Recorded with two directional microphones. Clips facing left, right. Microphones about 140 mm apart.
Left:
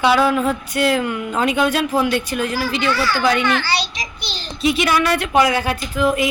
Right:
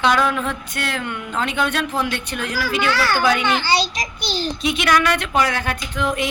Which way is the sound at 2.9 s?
60° right (ahead or behind).